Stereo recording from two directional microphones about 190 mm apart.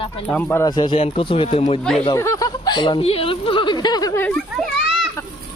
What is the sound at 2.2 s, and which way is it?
Speech, 15° left (ahead or behind).